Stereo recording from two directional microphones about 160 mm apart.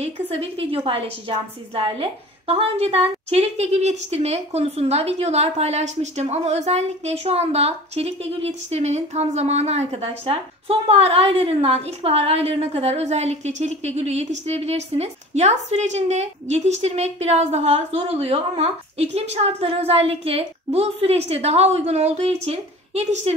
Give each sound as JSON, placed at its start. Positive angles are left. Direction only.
{"t": 0.0, "sound": "a woman's voice", "side_deg": -40}